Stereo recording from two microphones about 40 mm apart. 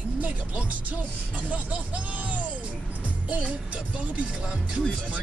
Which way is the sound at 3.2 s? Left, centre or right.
Right.